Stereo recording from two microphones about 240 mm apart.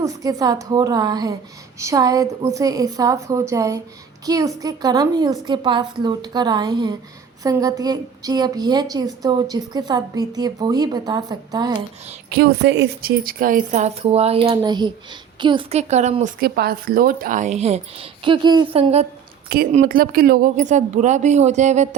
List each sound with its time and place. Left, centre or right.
0.0 s a woman's voice: centre
12.3 s a woman's voice: right
19.5 s speech: right